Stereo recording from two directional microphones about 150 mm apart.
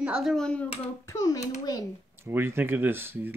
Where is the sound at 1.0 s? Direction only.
20° left (ahead or behind).